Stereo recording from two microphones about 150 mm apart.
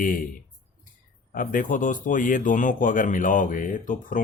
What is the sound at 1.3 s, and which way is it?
Speech, 65° left (ahead or behind).